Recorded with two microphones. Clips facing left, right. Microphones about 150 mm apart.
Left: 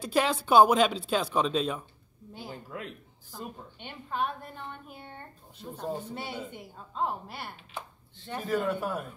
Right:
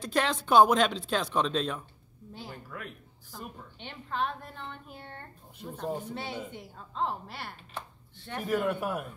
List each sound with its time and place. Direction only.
0.0 s speech: 5° left (ahead or behind)
2.5 s speech: 25° left (ahead or behind)
3.3 s a woman's voice: centre (ahead or behind)
5.9 s a man's voice: 10° right (ahead or behind)
6.1 s speech: 5° left (ahead or behind)
8.4 s a man's voice: 10° right (ahead or behind)